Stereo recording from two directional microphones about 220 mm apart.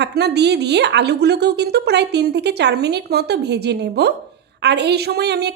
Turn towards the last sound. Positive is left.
turn(degrees=-50)  # may be behind; listen again after turning